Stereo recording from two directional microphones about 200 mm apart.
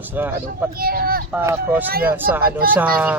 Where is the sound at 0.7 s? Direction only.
45° right (ahead or behind).